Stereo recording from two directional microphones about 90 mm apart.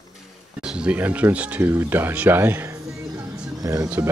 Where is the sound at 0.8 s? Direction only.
15° right (ahead or behind).